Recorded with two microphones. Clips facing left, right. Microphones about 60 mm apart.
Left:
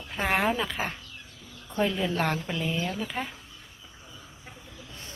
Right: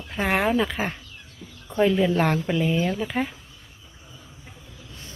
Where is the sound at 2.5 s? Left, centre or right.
Right.